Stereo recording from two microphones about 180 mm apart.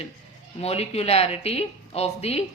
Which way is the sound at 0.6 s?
35° left (ahead or behind).